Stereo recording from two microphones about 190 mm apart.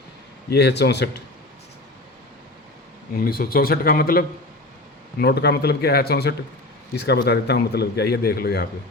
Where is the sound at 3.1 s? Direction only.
50° left (ahead or behind).